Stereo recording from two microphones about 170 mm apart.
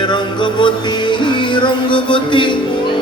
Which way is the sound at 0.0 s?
30° left (ahead or behind).